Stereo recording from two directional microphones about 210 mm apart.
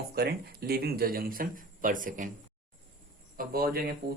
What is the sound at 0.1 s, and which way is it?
Speech, 45° right (ahead or behind).